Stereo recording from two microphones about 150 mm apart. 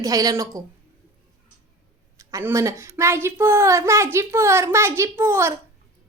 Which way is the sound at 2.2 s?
20° right (ahead or behind).